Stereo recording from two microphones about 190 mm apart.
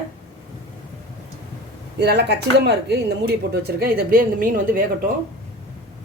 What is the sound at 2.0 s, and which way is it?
A woman's voice, 60° right (ahead or behind).